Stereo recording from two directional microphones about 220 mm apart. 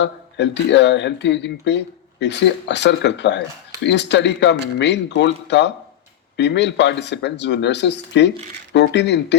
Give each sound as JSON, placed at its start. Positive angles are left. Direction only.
{"t": 0.0, "sound": "speech", "side_deg": 50}